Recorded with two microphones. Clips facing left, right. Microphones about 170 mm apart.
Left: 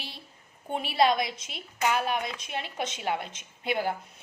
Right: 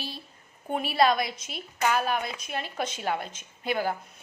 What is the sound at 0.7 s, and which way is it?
A woman's voice, 25° left (ahead or behind).